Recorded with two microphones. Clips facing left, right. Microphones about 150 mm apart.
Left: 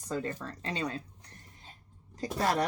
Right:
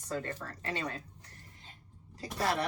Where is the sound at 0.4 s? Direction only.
20° left (ahead or behind).